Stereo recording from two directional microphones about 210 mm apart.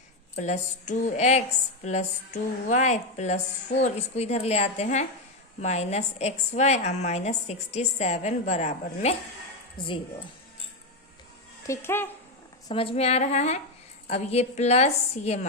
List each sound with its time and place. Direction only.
0.3 s a woman's voice: 35° left (ahead or behind)
11.7 s speech: 10° left (ahead or behind)
12.6 s a woman's voice: 25° left (ahead or behind)